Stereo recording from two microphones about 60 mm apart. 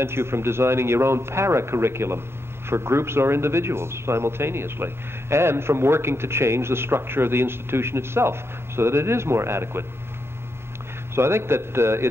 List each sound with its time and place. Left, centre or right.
0.0 s a man's voice: right
11.1 s a man's voice: right